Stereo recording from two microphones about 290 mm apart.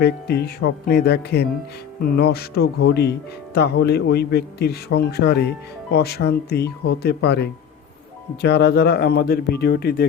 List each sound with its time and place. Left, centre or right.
0.0 s speech: left